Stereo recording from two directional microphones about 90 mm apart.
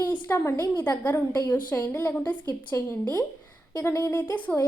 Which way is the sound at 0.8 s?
20° left (ahead or behind).